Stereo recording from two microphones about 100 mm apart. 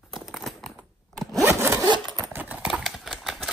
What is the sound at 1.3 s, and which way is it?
Sawing, 30° right (ahead or behind).